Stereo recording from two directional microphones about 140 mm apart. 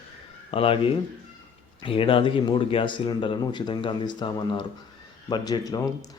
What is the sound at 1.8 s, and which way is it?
Speech, 40° left (ahead or behind).